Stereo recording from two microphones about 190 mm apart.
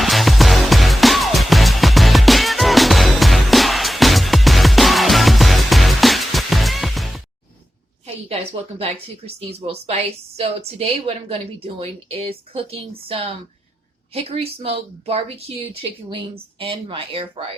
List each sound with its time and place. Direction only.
0.0 s music: centre (ahead or behind)
8.8 s a woman's voice: 30° right (ahead or behind)